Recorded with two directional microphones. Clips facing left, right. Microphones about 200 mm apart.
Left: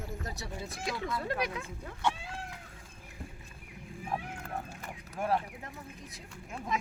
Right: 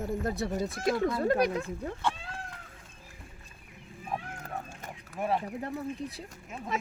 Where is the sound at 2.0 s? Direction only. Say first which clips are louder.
Left 5 dB; 10° left (ahead or behind).